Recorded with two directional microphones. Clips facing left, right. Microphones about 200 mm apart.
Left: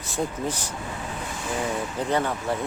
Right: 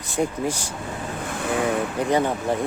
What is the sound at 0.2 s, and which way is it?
Speech, 10° right (ahead or behind).